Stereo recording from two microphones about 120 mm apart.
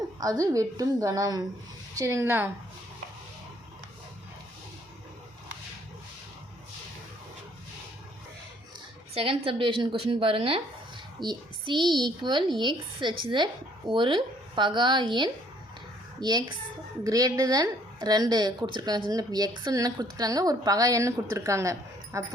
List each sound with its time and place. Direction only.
0.2 s a woman's voice: 30° right (ahead or behind)
9.1 s a woman's voice: 50° right (ahead or behind); by 22.2 s 25° right (ahead or behind)